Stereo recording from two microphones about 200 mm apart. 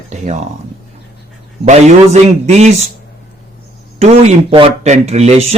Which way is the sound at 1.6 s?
35° right (ahead or behind).